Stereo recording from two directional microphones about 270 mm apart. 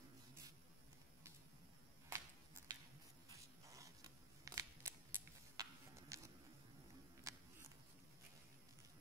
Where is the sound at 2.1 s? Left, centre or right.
Centre.